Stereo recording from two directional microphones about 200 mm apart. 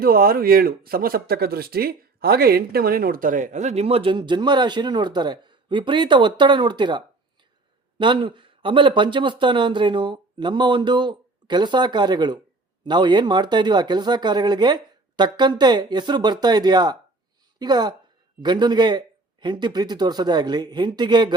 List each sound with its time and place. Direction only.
0.0 s speech: 50° right (ahead or behind); by 21.3 s 20° right (ahead or behind)